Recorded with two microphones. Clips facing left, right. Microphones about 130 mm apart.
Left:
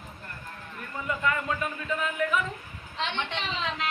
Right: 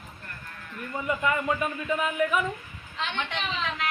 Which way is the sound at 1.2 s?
15° right (ahead or behind).